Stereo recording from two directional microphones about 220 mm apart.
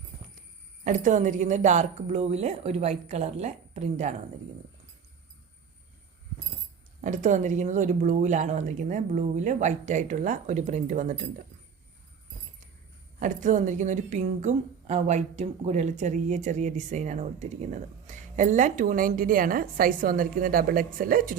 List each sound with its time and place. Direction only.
0.9 s a woman's voice: 35° right (ahead or behind)
7.0 s a woman's voice: 35° right (ahead or behind)
13.1 s a woman's voice: 35° right (ahead or behind)